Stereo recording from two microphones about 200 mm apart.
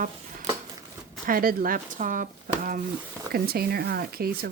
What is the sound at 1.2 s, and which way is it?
Speech, 45° right (ahead or behind).